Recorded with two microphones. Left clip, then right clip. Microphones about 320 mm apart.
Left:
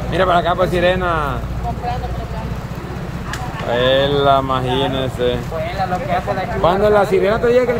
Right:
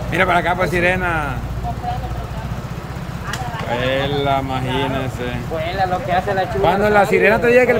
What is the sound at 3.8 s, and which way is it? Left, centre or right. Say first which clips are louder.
Speech: left 6 dB; centre.